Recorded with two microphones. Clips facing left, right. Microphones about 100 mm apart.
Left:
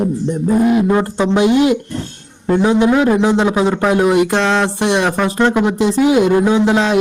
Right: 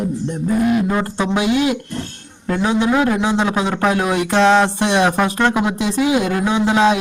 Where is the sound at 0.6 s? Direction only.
25° left (ahead or behind).